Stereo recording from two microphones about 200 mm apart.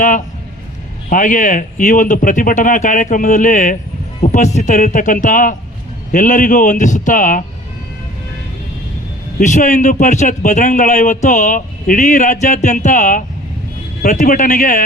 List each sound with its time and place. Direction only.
0.0 s a man's voice: 40° left (ahead or behind)
9.4 s a man's voice: 35° left (ahead or behind)